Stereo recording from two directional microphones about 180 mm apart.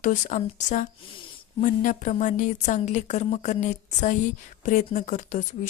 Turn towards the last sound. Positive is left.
turn(degrees=45)  # may be behind; listen again after turning